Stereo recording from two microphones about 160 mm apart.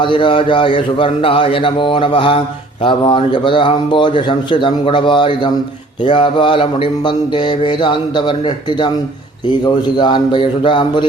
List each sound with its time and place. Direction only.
0.0 s a man's voice: 30° left (ahead or behind)
10.0 s a man's voice: 30° left (ahead or behind)